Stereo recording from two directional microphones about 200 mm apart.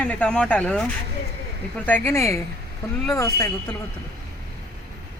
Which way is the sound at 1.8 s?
10° left (ahead or behind).